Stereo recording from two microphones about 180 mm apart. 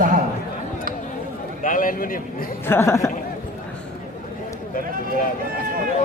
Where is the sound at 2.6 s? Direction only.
15° left (ahead or behind).